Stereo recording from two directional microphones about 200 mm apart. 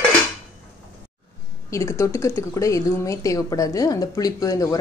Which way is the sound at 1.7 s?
15° left (ahead or behind).